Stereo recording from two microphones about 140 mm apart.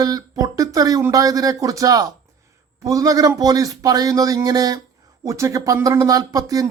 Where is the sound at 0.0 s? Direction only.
25° right (ahead or behind).